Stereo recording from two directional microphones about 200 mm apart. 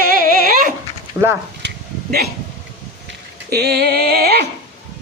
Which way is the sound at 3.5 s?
55° right (ahead or behind).